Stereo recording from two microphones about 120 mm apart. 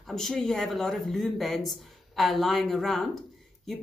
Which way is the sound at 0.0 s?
5° left (ahead or behind).